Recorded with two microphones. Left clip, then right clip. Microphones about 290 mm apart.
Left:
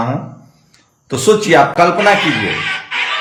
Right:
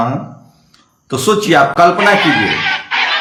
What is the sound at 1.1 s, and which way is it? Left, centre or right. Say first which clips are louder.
Speech: left 1 dB; centre.